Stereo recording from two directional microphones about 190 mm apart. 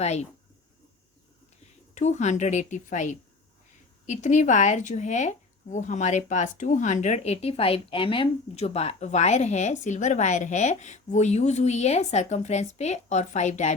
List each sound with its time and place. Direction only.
0.0 s speech: 35° left (ahead or behind)
2.0 s speech: 35° left (ahead or behind)